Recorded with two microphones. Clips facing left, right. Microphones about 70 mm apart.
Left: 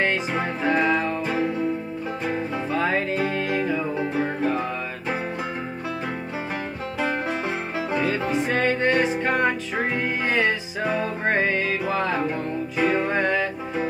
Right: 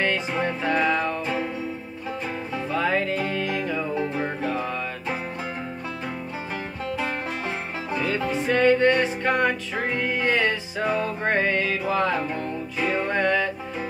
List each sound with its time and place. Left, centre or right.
0.0 s music: centre
1.2 s music: left
2.5 s music: centre
4.1 s music: centre
7.0 s music: left
10.8 s music: centre
12.8 s music: left
13.1 s music: centre